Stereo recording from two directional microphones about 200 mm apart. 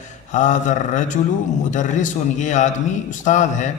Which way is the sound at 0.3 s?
40° left (ahead or behind).